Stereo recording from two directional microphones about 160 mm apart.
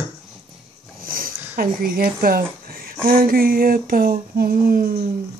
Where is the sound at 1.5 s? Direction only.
65° right (ahead or behind).